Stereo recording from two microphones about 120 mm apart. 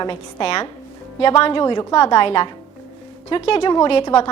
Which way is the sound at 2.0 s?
50° left (ahead or behind).